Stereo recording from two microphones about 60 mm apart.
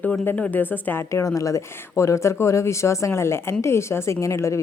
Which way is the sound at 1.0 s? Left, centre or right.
Left.